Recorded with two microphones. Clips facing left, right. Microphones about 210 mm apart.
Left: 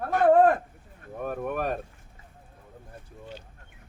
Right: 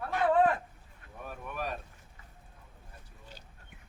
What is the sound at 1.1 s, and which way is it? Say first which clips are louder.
Speech: left 11 dB; 55° left (ahead or behind).